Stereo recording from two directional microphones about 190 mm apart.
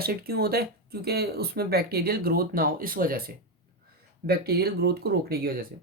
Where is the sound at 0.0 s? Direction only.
55° right (ahead or behind).